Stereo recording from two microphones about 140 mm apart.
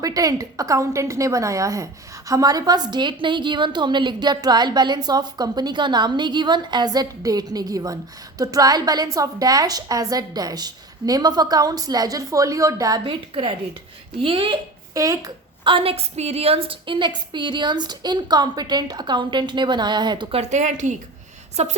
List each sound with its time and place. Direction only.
0.0 s a woman's voice: 25° right (ahead or behind)
13.1 s a woman's voice: 35° right (ahead or behind)
14.9 s a woman's voice: 25° right (ahead or behind)
15.6 s a woman's voice: 40° right (ahead or behind)
20.4 s a woman's voice: 55° right (ahead or behind)